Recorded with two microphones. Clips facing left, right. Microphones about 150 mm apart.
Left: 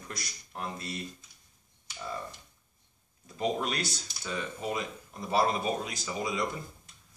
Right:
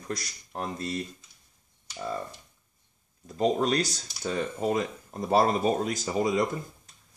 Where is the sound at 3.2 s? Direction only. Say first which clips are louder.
Right 6 dB; 40° right (ahead or behind).